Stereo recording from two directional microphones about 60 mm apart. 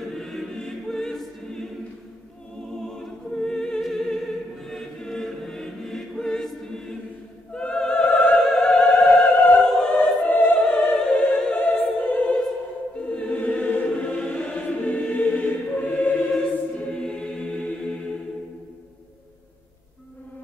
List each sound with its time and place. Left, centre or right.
0.0 s choir: centre
2.9 s choir: centre
3.8 s music: centre
4.6 s choir: centre
7.5 s opera: centre
8.4 s music: centre
9.6 s opera: centre
10.3 s opera: left
10.9 s music: centre
11.5 s choir: left
13.0 s music: centre
13.4 s choir: left
17.0 s choir: centre